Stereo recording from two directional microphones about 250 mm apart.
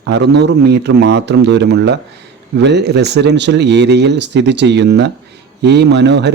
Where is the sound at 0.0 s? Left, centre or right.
Right.